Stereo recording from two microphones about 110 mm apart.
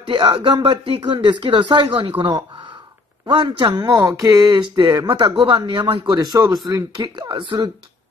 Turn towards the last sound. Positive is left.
turn(degrees=-45)  # may be behind; listen again after turning